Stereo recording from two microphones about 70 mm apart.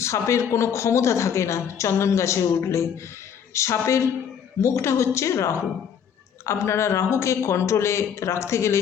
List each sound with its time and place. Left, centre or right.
0.0 s speech: left